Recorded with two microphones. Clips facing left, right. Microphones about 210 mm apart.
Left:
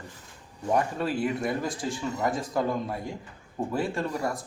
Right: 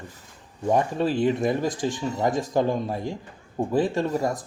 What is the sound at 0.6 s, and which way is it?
Speech, 25° right (ahead or behind).